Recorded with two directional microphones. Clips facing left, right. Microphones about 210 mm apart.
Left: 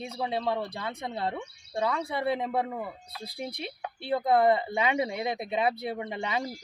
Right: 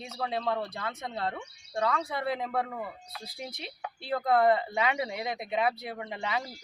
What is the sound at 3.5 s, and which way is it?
Speech, 60° left (ahead or behind).